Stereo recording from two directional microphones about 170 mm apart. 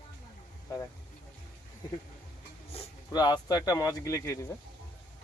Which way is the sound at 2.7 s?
35° left (ahead or behind).